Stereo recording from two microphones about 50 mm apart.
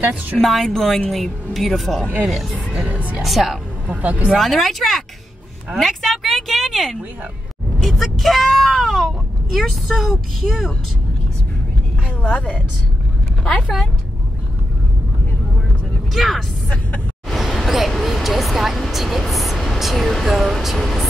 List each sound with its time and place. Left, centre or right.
0.4 s a woman's voice: centre
3.8 s speech: right
4.4 s a woman's voice: centre
12.2 s a woman's voice: left
13.4 s vehicle: left
16.1 s a woman's voice: centre
16.6 s speech: left
17.4 s vehicle: centre
19.8 s a woman's voice: centre